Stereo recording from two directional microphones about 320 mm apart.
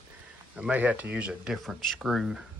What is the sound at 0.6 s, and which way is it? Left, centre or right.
Speech, centre.